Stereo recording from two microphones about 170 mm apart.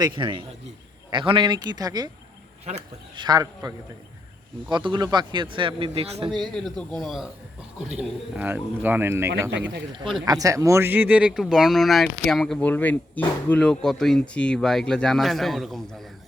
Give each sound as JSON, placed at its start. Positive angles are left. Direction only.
{"t": 0.2, "sound": "speech", "side_deg": -30}
{"t": 2.7, "sound": "speech", "side_deg": -40}
{"t": 3.2, "sound": "speech", "side_deg": -25}
{"t": 6.4, "sound": "speech", "side_deg": 5}
{"t": 8.4, "sound": "speech", "side_deg": -10}
{"t": 9.5, "sound": "speech", "side_deg": -90}
{"t": 10.2, "sound": "speech", "side_deg": -20}